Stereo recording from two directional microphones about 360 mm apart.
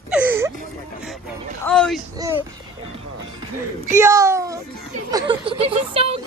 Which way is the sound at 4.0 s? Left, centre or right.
Centre.